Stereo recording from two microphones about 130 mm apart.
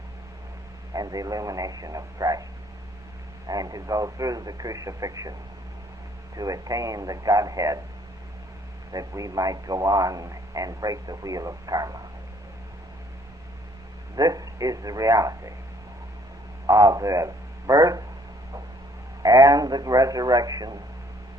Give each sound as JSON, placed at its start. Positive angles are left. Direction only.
{"t": 0.9, "sound": "a man's voice", "side_deg": -30}
{"t": 3.4, "sound": "a man's voice", "side_deg": -30}
{"t": 6.3, "sound": "a man's voice", "side_deg": -30}
{"t": 8.9, "sound": "a man's voice", "side_deg": -25}
{"t": 14.2, "sound": "a man's voice", "side_deg": -30}
{"t": 16.6, "sound": "speech", "side_deg": -30}
{"t": 19.2, "sound": "a man's voice", "side_deg": -25}